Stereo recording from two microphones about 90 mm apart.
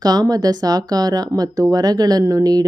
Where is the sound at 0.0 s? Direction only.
45° right (ahead or behind).